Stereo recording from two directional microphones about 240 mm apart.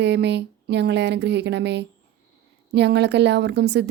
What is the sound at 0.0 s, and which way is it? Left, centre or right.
A woman's voice, right.